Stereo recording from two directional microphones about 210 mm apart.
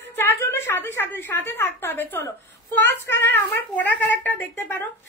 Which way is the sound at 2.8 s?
10° left (ahead or behind).